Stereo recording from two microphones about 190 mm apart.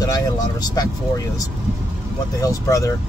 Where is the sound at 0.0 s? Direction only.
20° left (ahead or behind).